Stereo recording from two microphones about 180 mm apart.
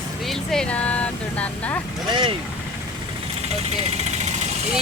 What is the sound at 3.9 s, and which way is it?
Vehicle, 40° right (ahead or behind).